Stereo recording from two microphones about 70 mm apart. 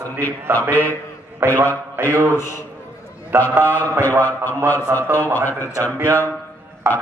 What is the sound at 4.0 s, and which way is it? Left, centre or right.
Speech, left.